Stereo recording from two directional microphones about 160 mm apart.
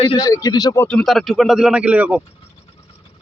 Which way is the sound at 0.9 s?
5° left (ahead or behind).